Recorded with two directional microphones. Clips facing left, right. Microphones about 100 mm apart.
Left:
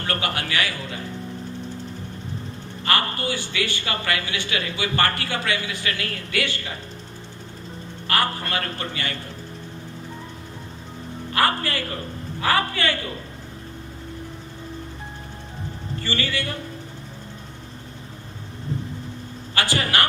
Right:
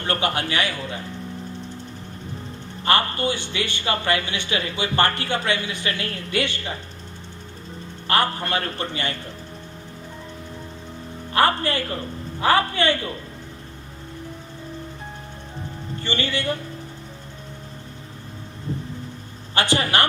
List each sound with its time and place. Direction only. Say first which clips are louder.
0.0 s speech: right 3 dB; 25° right (ahead or behind)
2.8 s speech: right 3 dB; 25° right (ahead or behind)
8.0 s speech: right 2 dB; 25° right (ahead or behind)
11.3 s a sound: right 3 dB; 25° right (ahead or behind)
12.4 s a man's voice: right 3 dB; 25° right (ahead or behind)
16.0 s speech: right 3 dB; 25° right (ahead or behind)
19.5 s speech: right 2 dB; 25° right (ahead or behind)